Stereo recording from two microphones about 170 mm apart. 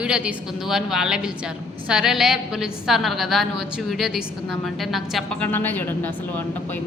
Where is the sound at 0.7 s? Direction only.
5° right (ahead or behind).